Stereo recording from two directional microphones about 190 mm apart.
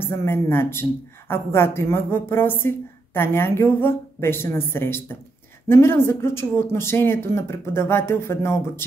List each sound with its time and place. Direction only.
0.0 s a woman's voice: 15° left (ahead or behind)